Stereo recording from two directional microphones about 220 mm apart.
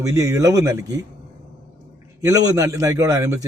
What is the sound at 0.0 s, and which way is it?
Speech, 15° right (ahead or behind).